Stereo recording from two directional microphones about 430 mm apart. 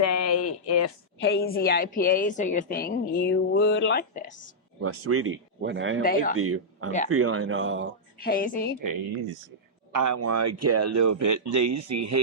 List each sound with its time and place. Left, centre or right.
0.0 s a sound: left
1.2 s a woman's voice: left
4.8 s speech: right
6.0 s a woman's voice: centre
6.3 s speech: right
8.2 s a woman's voice: centre
9.9 s speech: right